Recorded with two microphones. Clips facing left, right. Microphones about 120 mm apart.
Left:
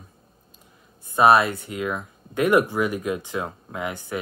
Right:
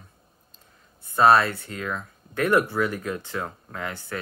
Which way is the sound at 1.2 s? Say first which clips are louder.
Left 1 dB; 15° left (ahead or behind).